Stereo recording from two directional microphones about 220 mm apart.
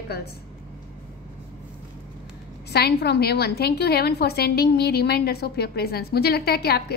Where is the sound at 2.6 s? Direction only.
45° left (ahead or behind).